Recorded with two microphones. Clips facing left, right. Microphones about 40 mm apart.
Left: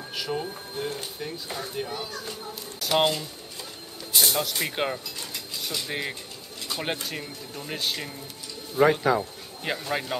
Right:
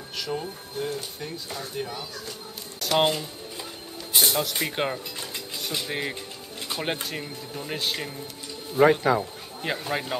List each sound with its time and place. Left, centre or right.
0.2 s speech: centre
3.0 s speech: centre